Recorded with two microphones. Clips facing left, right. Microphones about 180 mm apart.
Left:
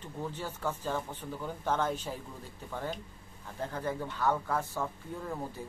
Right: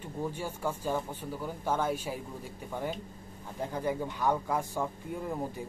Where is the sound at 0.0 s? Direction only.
10° right (ahead or behind).